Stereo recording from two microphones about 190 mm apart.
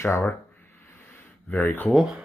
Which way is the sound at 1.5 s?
10° left (ahead or behind).